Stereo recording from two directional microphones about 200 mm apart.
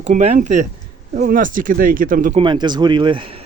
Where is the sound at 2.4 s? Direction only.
25° right (ahead or behind).